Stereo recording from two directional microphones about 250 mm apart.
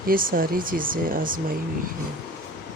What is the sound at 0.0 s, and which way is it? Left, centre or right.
Speech, right.